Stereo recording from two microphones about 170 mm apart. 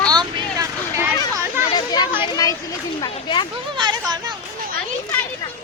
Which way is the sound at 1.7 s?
25° left (ahead or behind).